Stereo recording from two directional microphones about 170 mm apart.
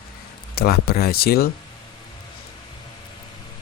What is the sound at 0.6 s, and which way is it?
Speech, 65° left (ahead or behind).